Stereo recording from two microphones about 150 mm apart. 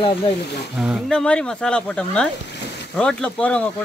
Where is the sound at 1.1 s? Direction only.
5° left (ahead or behind).